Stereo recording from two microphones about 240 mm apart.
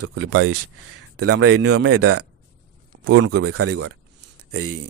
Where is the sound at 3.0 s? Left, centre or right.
Right.